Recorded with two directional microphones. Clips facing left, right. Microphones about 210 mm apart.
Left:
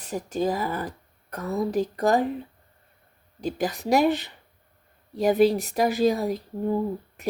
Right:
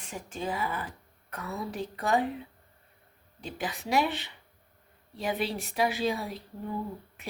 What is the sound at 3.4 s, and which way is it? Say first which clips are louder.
Speech: left 9 dB; 40° left (ahead or behind).